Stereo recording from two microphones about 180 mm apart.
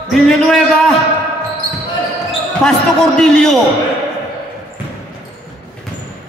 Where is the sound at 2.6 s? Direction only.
5° left (ahead or behind).